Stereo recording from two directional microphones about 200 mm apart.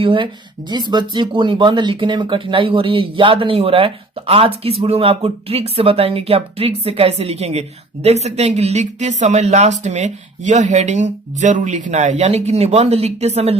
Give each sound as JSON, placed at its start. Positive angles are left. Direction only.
{"t": 0.0, "sound": "speech", "side_deg": -25}